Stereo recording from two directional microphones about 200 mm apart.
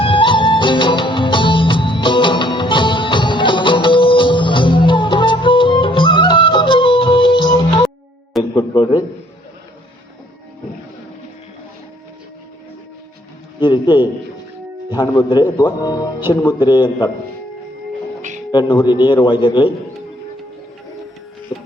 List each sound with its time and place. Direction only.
0.0 s music: 25° left (ahead or behind)
8.5 s a sound: 20° left (ahead or behind)
13.6 s a man's voice: 20° left (ahead or behind)
14.8 s music: 20° left (ahead or behind)
15.2 s a man's voice: 20° left (ahead or behind)
18.5 s a man's voice: 20° left (ahead or behind)
21.5 s music: 20° left (ahead or behind)